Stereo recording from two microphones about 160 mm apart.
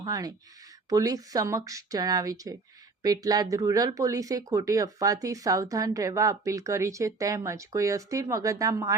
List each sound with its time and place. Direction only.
0.0 s speech: 25° right (ahead or behind)